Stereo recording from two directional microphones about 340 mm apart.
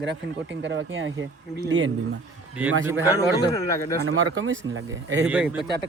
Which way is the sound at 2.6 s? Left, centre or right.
Centre.